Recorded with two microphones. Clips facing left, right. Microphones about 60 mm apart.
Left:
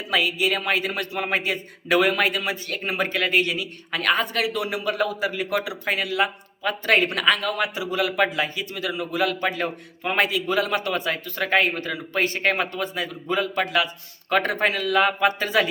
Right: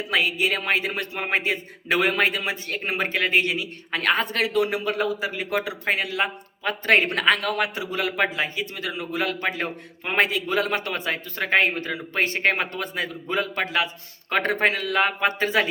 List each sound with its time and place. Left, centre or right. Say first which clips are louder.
0.1 s speech: left 1 dB; right
10.2 s speech: even; right
13.7 s speech: left 2 dB; right